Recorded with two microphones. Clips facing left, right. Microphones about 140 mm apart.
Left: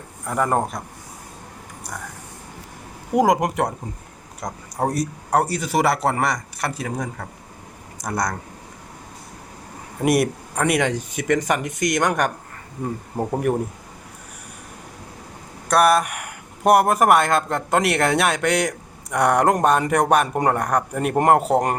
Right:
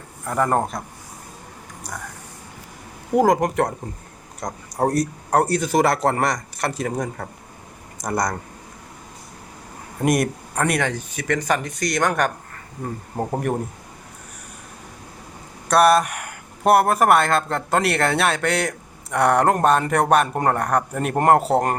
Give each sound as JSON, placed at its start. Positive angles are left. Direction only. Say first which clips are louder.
{"t": 0.3, "sound": "speech", "louder": "right 1 dB", "side_deg": 5}
{"t": 3.2, "sound": "speech", "louder": "right 1 dB", "side_deg": 10}
{"t": 10.0, "sound": "speech", "louder": "left 1 dB", "side_deg": 5}
{"t": 10.8, "sound": "speech", "louder": "left 2 dB", "side_deg": 20}
{"t": 13.1, "sound": "speech", "louder": "left 2 dB", "side_deg": 0}
{"t": 15.7, "sound": "speech", "louder": "right 1 dB", "side_deg": 5}